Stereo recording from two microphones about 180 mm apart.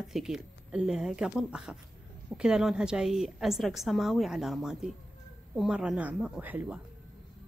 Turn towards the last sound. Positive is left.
turn(degrees=-10)  # may be behind; listen again after turning